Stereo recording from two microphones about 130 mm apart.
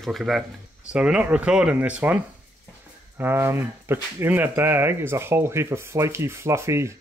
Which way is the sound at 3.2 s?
20° right (ahead or behind).